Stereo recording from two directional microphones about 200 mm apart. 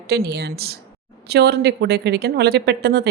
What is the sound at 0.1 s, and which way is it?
Speech, 55° right (ahead or behind).